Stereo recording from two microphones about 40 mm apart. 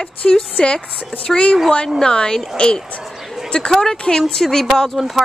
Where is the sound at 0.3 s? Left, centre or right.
Left.